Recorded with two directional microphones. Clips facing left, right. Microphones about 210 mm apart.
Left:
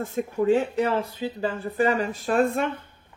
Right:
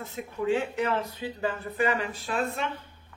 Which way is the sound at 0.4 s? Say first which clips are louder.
Left 5 dB; 40° left (ahead or behind).